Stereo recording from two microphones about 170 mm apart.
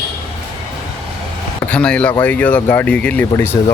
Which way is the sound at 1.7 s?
5° left (ahead or behind).